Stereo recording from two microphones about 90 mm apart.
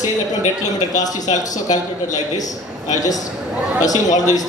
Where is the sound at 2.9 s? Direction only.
45° left (ahead or behind).